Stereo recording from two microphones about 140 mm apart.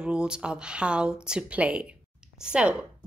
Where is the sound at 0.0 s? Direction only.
5° right (ahead or behind).